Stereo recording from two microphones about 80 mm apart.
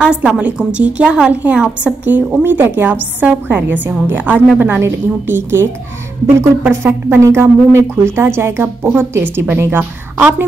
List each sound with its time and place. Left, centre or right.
0.0 s a woman's voice: centre